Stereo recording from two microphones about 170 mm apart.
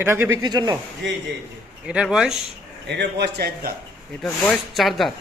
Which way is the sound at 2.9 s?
80° right.